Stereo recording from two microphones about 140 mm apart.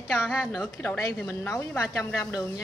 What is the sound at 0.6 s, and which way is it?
A woman's voice, 15° left (ahead or behind).